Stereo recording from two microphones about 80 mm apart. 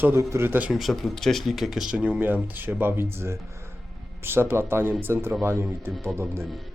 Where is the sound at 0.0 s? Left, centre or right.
Right.